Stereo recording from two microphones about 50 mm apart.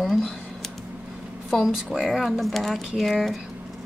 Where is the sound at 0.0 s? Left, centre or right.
Centre.